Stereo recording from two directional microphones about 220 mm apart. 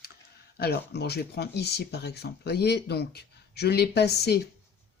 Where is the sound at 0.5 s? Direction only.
45° left (ahead or behind).